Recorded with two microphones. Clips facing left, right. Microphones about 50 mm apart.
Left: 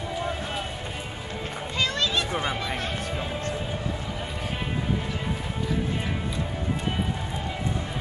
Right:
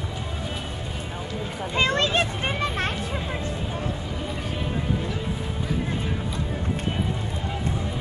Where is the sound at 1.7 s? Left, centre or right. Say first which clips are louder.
Right 4 dB; right.